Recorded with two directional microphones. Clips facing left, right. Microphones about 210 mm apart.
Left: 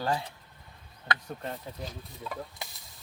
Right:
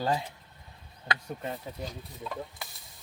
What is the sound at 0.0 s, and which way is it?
Speech, 15° right (ahead or behind).